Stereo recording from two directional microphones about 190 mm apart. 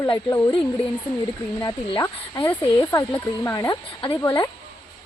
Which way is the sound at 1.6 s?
20° left (ahead or behind).